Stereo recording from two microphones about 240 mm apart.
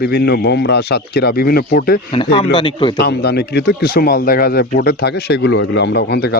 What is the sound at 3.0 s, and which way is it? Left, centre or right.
Speech, left.